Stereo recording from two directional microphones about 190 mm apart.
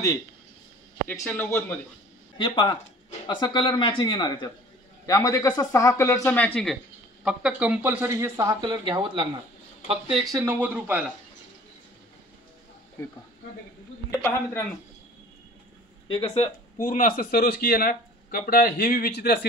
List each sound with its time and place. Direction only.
1.2 s speech: 10° left (ahead or behind)
2.3 s speech: 25° left (ahead or behind); by 6.8 s 5° left (ahead or behind)
7.2 s speech: 5° right (ahead or behind); by 9.3 s 25° right (ahead or behind)
10.3 s speech: 10° right (ahead or behind)
13.0 s speech: 10° left (ahead or behind)
14.2 s speech: 15° left (ahead or behind)
16.1 s speech: 25° left (ahead or behind)
16.7 s speech: 45° left (ahead or behind)